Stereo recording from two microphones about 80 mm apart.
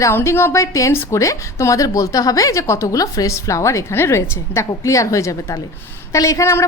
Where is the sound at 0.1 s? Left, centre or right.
Left.